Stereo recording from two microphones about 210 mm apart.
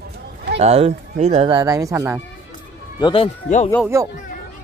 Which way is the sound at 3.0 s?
25° left (ahead or behind).